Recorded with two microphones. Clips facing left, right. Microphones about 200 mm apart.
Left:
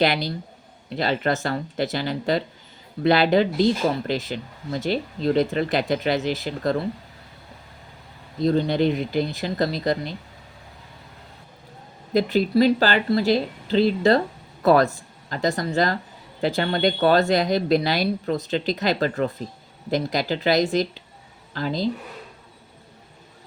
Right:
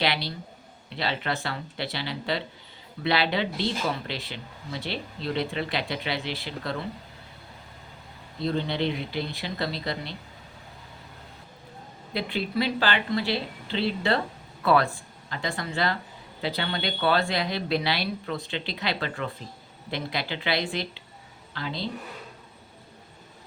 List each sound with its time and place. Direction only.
0.0 s speech: 45° left (ahead or behind)
8.4 s speech: 40° left (ahead or behind)
12.1 s speech: 45° left (ahead or behind)